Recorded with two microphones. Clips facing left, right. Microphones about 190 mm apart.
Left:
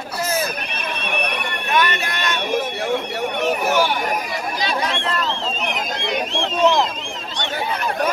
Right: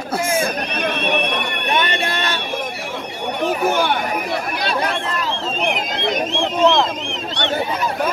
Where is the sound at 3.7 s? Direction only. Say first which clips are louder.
Even; 60° right (ahead or behind).